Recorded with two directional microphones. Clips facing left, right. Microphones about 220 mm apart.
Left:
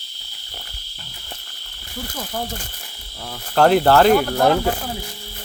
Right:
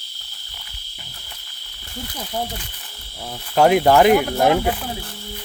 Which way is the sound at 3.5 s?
10° right (ahead or behind).